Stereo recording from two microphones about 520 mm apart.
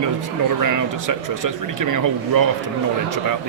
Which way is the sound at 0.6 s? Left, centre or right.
Right.